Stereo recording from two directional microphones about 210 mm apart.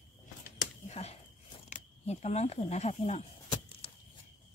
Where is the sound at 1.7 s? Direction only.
30° left (ahead or behind).